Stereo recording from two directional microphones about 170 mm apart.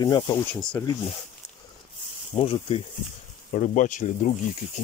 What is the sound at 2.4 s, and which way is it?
Speech, 35° left (ahead or behind).